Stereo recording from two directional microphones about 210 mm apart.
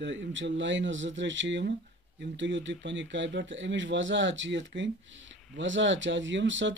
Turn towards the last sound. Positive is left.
turn(degrees=-60)  # may be behind; listen again after turning